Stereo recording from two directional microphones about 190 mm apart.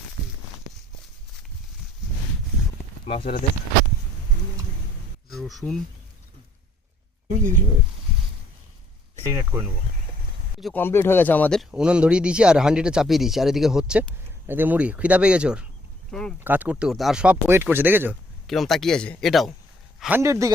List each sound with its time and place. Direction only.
3.1 s speech: 30° left (ahead or behind)
5.3 s speech: centre (ahead or behind)
7.3 s speech: 45° right (ahead or behind)
9.2 s speech: 15° right (ahead or behind)
10.6 s speech: 5° left (ahead or behind)
11.7 s speech: 5° right (ahead or behind)
18.4 s speech: centre (ahead or behind); by 20.5 s 15° right (ahead or behind)